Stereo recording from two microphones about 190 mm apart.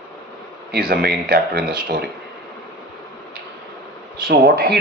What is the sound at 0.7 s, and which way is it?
Speech, 55° right (ahead or behind).